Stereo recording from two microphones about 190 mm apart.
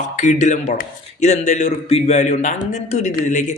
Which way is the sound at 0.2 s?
40° left (ahead or behind).